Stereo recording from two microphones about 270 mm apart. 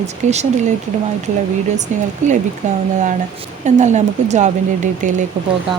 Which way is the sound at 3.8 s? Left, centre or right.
Right.